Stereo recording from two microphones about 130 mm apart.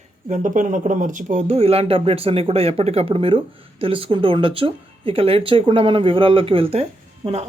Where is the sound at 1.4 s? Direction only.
50° right (ahead or behind).